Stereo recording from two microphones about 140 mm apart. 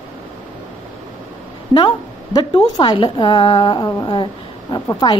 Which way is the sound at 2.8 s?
35° left (ahead or behind).